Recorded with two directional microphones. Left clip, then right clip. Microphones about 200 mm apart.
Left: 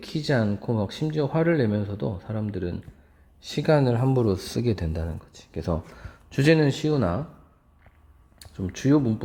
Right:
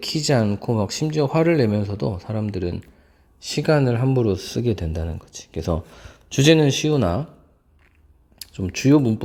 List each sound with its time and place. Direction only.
0.3 s speech: 30° right (ahead or behind)
8.4 s speech: 30° right (ahead or behind)